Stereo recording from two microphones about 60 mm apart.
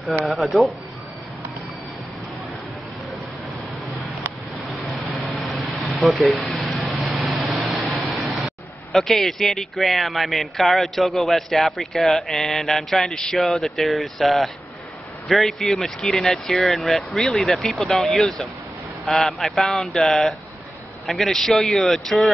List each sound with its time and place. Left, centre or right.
0.2 s speech: centre
4.8 s vehicle: centre
5.3 s air conditioning: centre
6.5 s a sound: centre
6.8 s vehicle: centre
7.6 s speech: centre